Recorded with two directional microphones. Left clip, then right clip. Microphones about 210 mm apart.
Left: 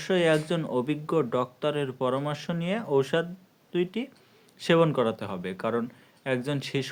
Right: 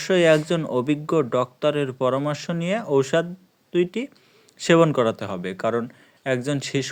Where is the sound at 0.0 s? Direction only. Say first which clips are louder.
Right 6 dB; 35° right (ahead or behind).